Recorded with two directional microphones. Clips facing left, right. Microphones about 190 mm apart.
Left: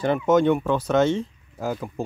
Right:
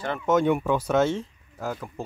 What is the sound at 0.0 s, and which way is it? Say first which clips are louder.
Speech: left 8 dB; 15° left (ahead or behind).